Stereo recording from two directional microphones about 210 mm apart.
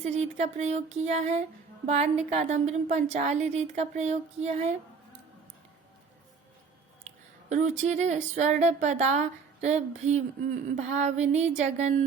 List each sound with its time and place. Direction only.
0.0 s speech: 30° right (ahead or behind)
7.5 s speech: 35° right (ahead or behind)